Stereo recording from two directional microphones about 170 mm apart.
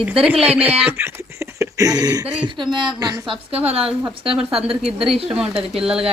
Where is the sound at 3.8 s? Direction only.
5° right (ahead or behind).